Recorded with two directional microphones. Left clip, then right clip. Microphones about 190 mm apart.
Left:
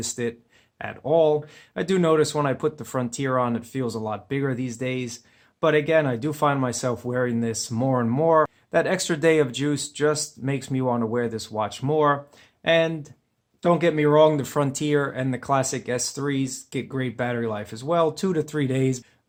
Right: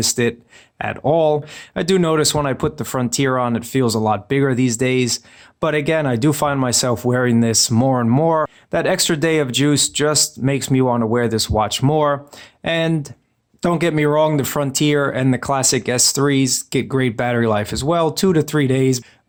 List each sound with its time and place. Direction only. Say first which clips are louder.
0.0 s speech: right 10 dB; 30° right (ahead or behind)